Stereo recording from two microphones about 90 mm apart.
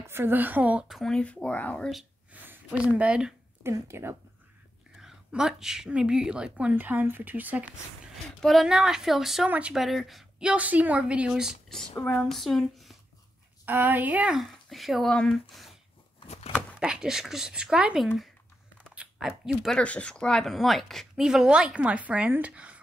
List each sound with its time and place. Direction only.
0.0 s speech: 25° right (ahead or behind)
0.8 s speech: centre (ahead or behind)
2.3 s a sound: 20° right (ahead or behind)
2.8 s a woman's voice: 15° right (ahead or behind)
3.6 s speech: 30° right (ahead or behind)
5.0 s a woman's voice: 5° right (ahead or behind)
8.4 s speech: centre (ahead or behind)
9.5 s a woman's voice: 15° right (ahead or behind)
9.8 s speech: centre (ahead or behind)
10.4 s a woman's voice: 15° right (ahead or behind)
12.0 s speech: 10° left (ahead or behind)
13.7 s speech: 20° right (ahead or behind)
14.3 s a woman's voice: centre (ahead or behind)
19.8 s a woman's voice: 10° left (ahead or behind); by 22.8 s 15° right (ahead or behind)